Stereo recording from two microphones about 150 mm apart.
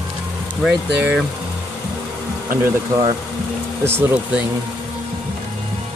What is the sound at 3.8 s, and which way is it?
Speech, 15° right (ahead or behind).